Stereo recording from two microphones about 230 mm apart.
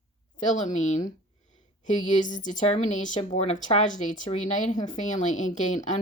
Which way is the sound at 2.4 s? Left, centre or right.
Left.